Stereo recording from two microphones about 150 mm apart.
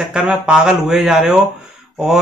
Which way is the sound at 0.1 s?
5° right (ahead or behind).